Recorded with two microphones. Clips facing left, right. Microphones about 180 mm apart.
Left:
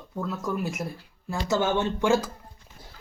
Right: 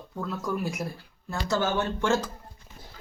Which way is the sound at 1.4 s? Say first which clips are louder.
Left 2 dB; 25° left (ahead or behind).